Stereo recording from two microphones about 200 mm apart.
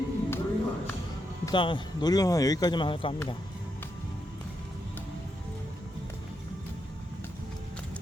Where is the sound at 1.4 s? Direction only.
25° left (ahead or behind).